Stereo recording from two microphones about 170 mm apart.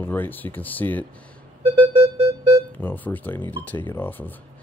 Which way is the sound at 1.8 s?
35° right (ahead or behind).